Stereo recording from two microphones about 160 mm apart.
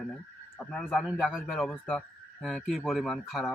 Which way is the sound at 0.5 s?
5° left (ahead or behind).